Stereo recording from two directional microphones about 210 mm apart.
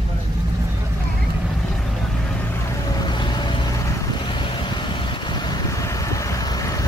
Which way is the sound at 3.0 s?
20° left (ahead or behind).